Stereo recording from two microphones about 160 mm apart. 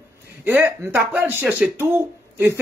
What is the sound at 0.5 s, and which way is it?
Speech, 15° right (ahead or behind).